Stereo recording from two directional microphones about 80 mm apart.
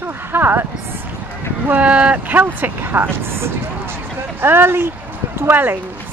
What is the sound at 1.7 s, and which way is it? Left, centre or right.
Speech, centre.